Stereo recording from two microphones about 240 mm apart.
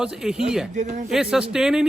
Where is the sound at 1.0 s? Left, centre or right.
Centre.